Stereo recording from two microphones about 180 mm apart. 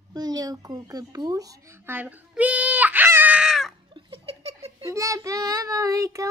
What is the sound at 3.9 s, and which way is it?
Laughter, 30° right (ahead or behind).